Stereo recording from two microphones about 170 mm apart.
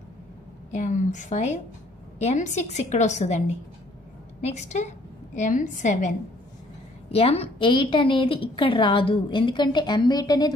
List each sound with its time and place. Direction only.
0.7 s a woman's voice: 45° left (ahead or behind)
7.1 s a woman's voice: 35° left (ahead or behind)